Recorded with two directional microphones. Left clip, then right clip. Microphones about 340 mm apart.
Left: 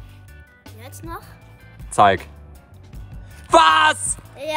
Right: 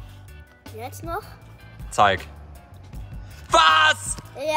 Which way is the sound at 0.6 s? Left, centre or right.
Centre.